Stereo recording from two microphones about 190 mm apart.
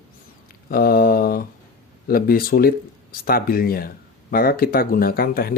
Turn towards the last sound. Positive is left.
turn(degrees=50)  # may be behind; listen again after turning